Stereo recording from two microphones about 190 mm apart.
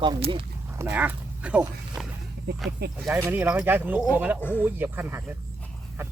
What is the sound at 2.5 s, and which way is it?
Speech, 60° right (ahead or behind).